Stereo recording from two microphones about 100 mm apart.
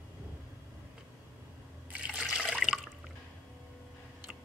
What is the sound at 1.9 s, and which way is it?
Trickle, 15° right (ahead or behind).